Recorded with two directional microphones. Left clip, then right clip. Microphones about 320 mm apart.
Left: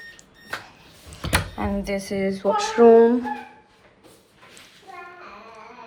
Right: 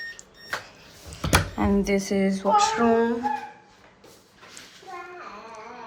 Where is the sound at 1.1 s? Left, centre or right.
Centre.